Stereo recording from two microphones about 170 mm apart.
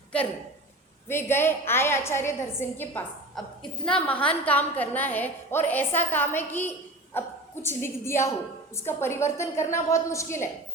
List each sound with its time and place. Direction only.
1.0 s a woman's voice: 15° left (ahead or behind)